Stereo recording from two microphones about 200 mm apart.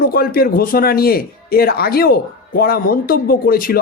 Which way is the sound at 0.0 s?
50° left (ahead or behind).